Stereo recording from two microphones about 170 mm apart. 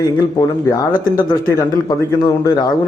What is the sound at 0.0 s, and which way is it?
A man's voice, 20° left (ahead or behind).